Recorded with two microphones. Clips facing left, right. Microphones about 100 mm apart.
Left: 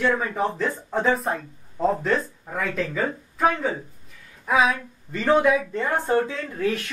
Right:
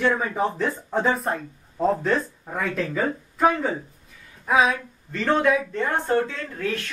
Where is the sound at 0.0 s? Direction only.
Centre (ahead or behind).